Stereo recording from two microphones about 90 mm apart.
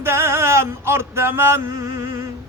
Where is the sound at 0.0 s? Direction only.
30° right (ahead or behind).